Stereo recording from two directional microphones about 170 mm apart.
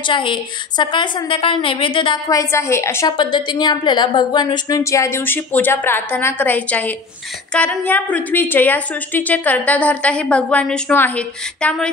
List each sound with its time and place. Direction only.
0.0 s a woman's voice: 30° left (ahead or behind)
3.2 s a woman's voice: 25° left (ahead or behind); by 11.9 s 5° left (ahead or behind)